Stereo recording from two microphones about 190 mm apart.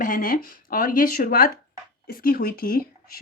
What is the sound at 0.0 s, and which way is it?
Speech, 45° left (ahead or behind).